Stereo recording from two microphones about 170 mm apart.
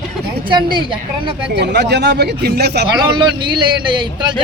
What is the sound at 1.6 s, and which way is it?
Speech, 80° right.